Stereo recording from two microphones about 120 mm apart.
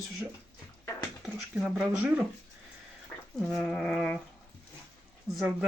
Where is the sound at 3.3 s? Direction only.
5° left (ahead or behind).